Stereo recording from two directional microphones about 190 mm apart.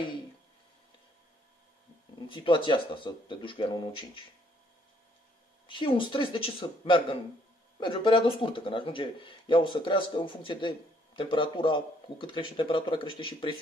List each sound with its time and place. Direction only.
2.2 s speech: 25° left (ahead or behind)
5.7 s speech: 25° left (ahead or behind)